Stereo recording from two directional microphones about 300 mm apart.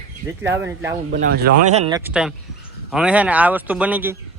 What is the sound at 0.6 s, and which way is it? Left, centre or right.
Speech, centre.